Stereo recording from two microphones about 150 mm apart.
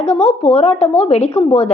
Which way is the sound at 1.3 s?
15° left (ahead or behind).